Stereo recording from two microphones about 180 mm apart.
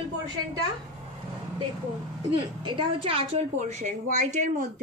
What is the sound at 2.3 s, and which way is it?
A woman's voice, 25° right (ahead or behind).